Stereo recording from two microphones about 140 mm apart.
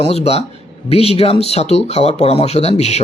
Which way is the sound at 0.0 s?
45° left (ahead or behind).